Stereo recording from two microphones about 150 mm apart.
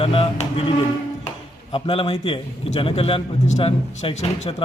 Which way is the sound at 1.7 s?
40° left (ahead or behind).